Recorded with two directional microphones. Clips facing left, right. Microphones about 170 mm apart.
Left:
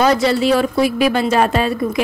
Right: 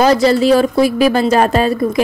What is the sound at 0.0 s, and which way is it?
A woman's voice, 40° right (ahead or behind).